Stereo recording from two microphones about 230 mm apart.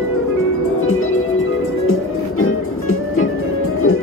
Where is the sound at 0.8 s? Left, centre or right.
Left.